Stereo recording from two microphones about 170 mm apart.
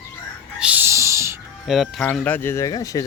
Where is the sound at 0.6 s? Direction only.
10° right (ahead or behind).